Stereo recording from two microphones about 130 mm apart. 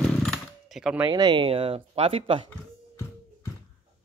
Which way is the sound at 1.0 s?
35° right (ahead or behind).